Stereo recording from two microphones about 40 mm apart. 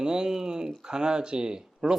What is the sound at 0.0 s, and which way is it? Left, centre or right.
Speech, centre.